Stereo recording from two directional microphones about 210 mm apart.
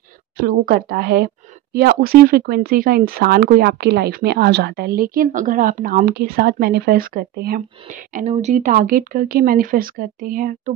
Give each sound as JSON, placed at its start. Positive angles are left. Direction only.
{"t": 0.4, "sound": "speech", "side_deg": -45}